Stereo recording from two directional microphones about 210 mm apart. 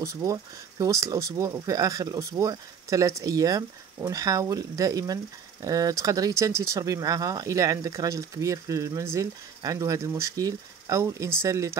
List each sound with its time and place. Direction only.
0.0 s speech: 15° right (ahead or behind)